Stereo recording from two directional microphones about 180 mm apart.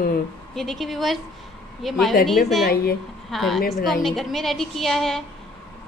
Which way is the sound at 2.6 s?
55° left (ahead or behind).